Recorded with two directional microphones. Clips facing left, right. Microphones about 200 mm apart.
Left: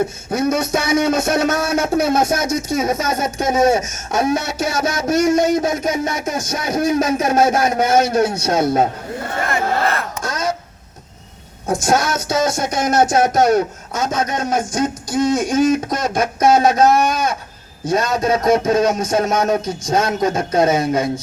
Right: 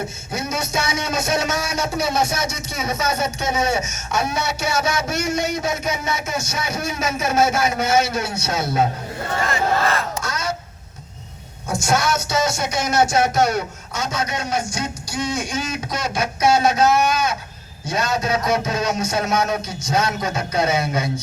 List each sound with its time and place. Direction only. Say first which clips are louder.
0.3 s a man's voice: left 8 dB; 55° left (ahead or behind)
9.4 s a sound: left 1 dB; 55° left (ahead or behind)
11.7 s a man's voice: left 3 dB; 50° left (ahead or behind)